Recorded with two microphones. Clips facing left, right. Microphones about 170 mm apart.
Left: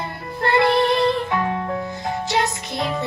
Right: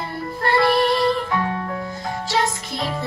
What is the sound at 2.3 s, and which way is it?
Music, 20° left (ahead or behind).